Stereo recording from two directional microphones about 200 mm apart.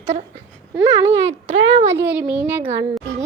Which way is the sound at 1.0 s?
65° right (ahead or behind).